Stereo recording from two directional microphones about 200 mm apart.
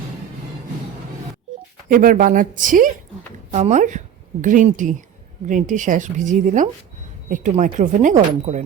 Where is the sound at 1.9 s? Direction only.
45° right (ahead or behind).